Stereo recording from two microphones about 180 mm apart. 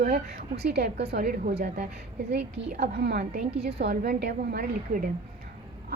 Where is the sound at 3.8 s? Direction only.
55° right (ahead or behind).